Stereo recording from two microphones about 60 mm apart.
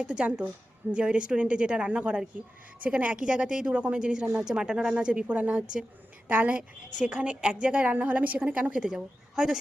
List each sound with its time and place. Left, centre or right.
0.0 s a woman's voice: centre